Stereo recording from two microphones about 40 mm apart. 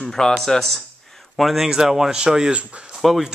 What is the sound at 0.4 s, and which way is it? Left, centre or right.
Speech, centre.